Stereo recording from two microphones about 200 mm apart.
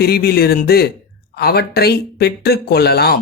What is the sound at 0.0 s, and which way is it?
Speech, 50° left (ahead or behind).